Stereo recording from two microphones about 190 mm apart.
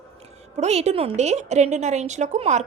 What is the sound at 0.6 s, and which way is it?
A woman's voice, 35° right (ahead or behind).